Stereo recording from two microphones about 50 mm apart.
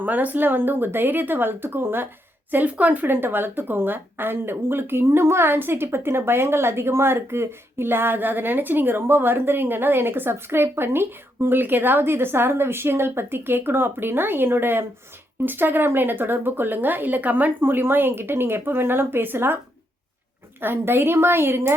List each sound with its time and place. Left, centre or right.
0.0 s speech: right
2.5 s speech: right
20.6 s speech: right